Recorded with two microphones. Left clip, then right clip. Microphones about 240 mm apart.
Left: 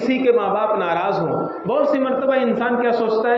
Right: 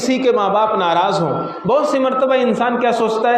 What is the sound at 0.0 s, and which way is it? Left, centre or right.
A man's voice, right.